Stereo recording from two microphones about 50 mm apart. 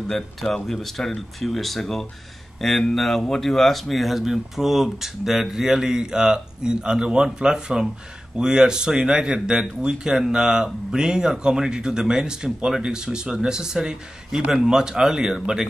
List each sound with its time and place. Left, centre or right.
0.1 s speech: centre